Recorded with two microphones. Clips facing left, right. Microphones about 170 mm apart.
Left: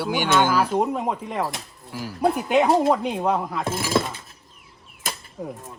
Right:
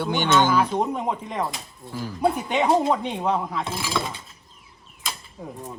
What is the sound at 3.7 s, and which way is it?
Speech, 45° left (ahead or behind).